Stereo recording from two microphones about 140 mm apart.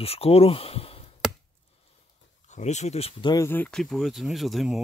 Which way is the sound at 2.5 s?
55° left (ahead or behind).